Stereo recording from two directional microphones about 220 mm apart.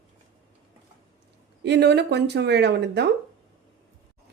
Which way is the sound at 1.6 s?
50° right (ahead or behind).